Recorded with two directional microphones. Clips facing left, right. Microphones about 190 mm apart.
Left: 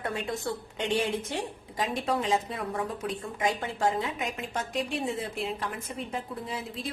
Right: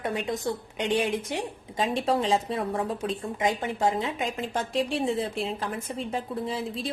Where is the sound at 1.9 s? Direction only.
30° right (ahead or behind).